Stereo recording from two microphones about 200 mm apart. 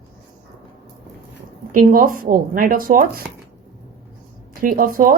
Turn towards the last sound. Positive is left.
turn(degrees=-45)  # may be behind; listen again after turning